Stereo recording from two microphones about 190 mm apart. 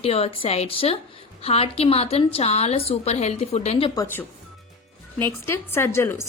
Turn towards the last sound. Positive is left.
turn(degrees=15)  # may be behind; listen again after turning